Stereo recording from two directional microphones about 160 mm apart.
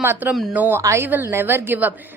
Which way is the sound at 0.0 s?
10° right (ahead or behind).